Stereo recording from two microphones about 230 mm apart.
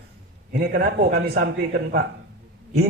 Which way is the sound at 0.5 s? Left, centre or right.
Right.